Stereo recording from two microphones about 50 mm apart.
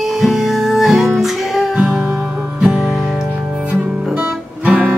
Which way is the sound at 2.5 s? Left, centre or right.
Centre.